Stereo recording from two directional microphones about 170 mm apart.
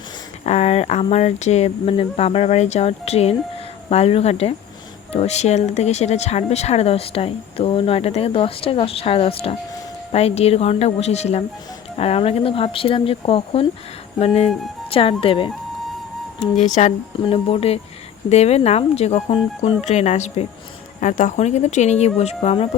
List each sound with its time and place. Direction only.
0.4 s speech: 40° left (ahead or behind)
14.8 s speech: 35° left (ahead or behind)
16.6 s speech: 40° left (ahead or behind)